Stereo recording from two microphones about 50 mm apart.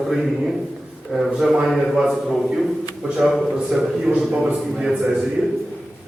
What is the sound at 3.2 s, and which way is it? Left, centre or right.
Mantra, centre.